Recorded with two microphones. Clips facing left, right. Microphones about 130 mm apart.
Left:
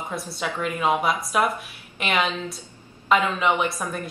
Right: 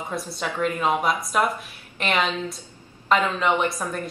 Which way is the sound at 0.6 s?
5° left (ahead or behind).